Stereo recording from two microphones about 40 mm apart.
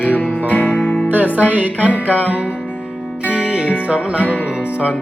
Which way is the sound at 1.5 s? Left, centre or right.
Right.